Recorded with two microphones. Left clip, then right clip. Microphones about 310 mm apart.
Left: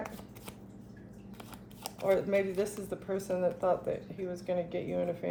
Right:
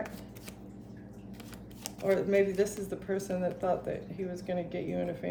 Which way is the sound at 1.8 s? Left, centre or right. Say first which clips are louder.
Even; centre.